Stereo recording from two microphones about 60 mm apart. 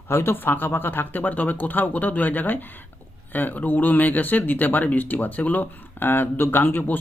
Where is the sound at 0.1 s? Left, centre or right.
Left.